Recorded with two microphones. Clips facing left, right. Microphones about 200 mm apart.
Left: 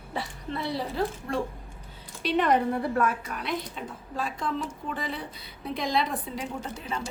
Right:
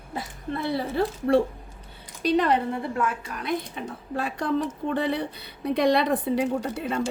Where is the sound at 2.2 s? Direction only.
35° right (ahead or behind).